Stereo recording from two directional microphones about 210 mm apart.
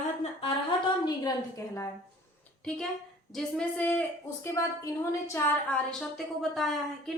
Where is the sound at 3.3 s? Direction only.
5° left (ahead or behind).